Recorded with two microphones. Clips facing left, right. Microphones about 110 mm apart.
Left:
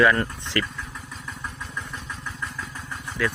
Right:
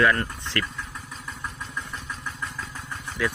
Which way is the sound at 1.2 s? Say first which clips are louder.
Even; 5° right (ahead or behind).